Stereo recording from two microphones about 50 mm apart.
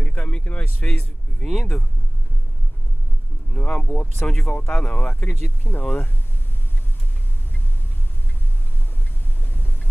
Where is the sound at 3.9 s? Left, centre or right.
Left.